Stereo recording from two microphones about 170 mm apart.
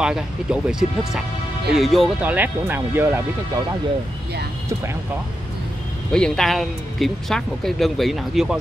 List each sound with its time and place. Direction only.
0.0 s speech: 5° right (ahead or behind)
2.2 s speech: 10° right (ahead or behind)
6.1 s speech: 5° left (ahead or behind)